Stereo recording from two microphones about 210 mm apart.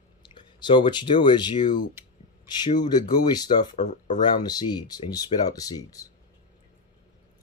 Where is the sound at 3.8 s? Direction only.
35° left (ahead or behind).